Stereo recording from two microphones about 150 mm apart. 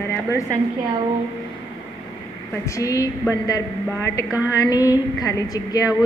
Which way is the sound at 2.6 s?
20° left (ahead or behind).